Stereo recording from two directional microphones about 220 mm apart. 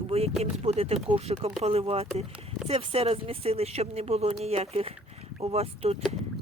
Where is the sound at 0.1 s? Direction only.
30° right (ahead or behind).